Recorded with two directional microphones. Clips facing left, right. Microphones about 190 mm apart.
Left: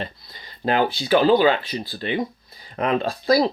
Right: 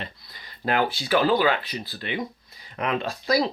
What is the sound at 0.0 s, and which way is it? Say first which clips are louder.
Speech: left 6 dB; 25° left (ahead or behind).